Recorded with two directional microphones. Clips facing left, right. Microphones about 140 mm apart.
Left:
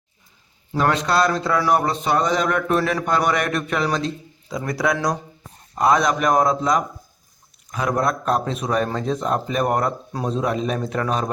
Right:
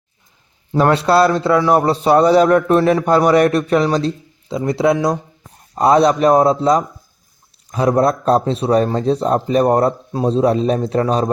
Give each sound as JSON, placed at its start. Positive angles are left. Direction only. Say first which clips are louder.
{"t": 0.7, "sound": "a man's voice", "louder": "right 6 dB", "side_deg": -30}